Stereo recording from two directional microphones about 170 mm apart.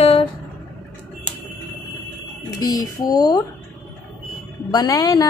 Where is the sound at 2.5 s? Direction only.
20° left (ahead or behind).